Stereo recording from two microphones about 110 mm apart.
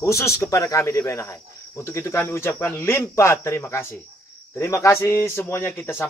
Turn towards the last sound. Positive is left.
turn(degrees=20)  # may be behind; listen again after turning